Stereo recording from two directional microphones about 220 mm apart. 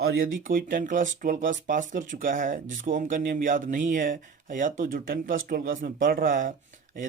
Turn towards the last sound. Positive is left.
turn(degrees=-40)  # may be behind; listen again after turning